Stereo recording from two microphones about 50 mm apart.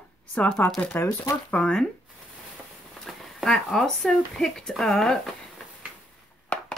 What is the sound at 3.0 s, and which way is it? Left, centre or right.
Speech, centre.